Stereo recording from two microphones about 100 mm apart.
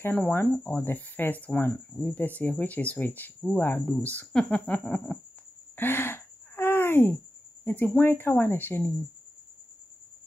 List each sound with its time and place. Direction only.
0.3 s speech: 20° left (ahead or behind)
5.8 s gasp: 20° left (ahead or behind)
7.6 s speech: 15° left (ahead or behind)